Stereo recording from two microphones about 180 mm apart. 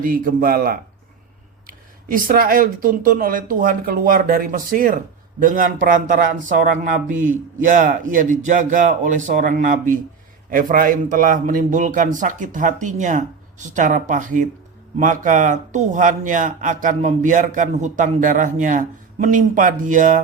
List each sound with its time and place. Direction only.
0.0 s speech: 50° right (ahead or behind)